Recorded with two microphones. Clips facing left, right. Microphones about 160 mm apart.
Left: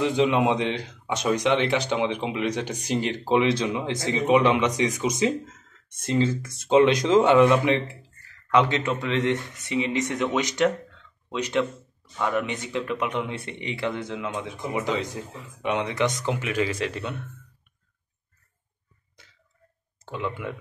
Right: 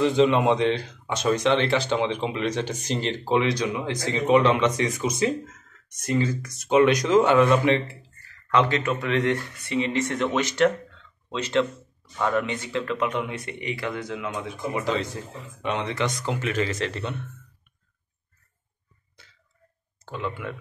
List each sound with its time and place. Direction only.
0.0 s speech: 15° left (ahead or behind)